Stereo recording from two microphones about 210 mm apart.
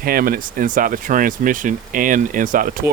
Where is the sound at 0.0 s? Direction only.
45° right (ahead or behind).